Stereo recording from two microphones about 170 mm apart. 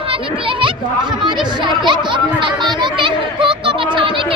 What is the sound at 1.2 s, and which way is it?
Chatter, 25° right (ahead or behind).